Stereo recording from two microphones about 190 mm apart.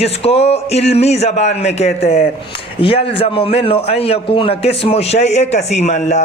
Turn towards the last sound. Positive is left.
turn(degrees=35)  # may be behind; listen again after turning